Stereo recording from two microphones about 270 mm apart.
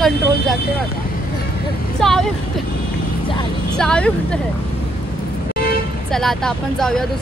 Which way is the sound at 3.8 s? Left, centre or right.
Centre.